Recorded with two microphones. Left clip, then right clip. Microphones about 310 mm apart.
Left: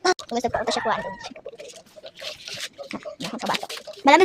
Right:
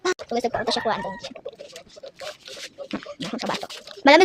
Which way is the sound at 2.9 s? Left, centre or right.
Centre.